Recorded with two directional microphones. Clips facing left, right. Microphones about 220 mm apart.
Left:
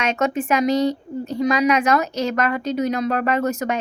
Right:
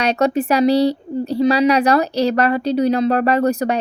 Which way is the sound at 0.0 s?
35° right (ahead or behind).